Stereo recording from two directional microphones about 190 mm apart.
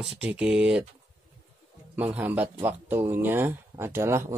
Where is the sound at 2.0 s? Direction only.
10° right (ahead or behind).